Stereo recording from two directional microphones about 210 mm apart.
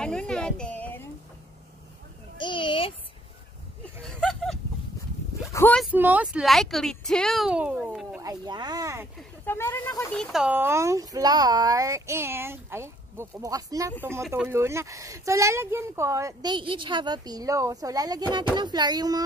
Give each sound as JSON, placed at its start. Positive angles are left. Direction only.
{"t": 0.0, "sound": "speech", "side_deg": 5}
{"t": 2.3, "sound": "a child's voice", "side_deg": 25}
{"t": 3.8, "sound": "a sound", "side_deg": 5}
{"t": 5.5, "sound": "speech", "side_deg": 10}
{"t": 5.8, "sound": "speech", "side_deg": -5}
{"t": 8.2, "sound": "speech", "side_deg": -20}
{"t": 9.5, "sound": "speech", "side_deg": 10}
{"t": 10.3, "sound": "speech", "side_deg": -5}